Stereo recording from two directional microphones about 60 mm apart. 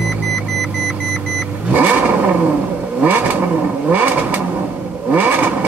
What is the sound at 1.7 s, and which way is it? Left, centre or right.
Vehicle, right.